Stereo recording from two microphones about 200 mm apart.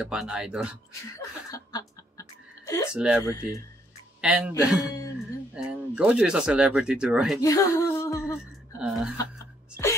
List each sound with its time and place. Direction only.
0.0 s speech: 5° right (ahead or behind)
1.5 s music: 15° left (ahead or behind)
2.9 s speech: 5° right (ahead or behind)
3.3 s speech: 15° left (ahead or behind)
4.2 s speech: 5° right (ahead or behind)
4.8 s a sound: 15° left (ahead or behind)
5.5 s speech: 5° right (ahead or behind)
7.4 s a sound: 15° left (ahead or behind)
8.8 s speech: centre (ahead or behind)